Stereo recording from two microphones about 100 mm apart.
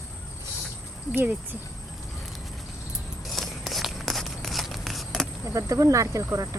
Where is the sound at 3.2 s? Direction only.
Centre (ahead or behind).